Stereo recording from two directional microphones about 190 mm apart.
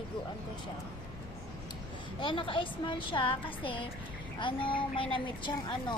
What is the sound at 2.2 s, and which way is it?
A woman's voice, 25° left (ahead or behind).